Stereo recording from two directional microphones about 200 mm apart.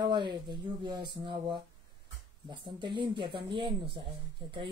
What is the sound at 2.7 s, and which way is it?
Speech, 25° right (ahead or behind).